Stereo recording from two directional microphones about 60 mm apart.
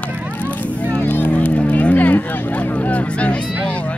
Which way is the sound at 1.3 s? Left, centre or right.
Left.